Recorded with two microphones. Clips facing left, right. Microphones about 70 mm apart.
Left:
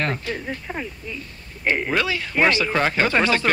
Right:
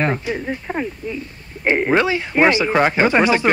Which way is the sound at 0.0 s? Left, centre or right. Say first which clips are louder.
Right 5 dB; centre.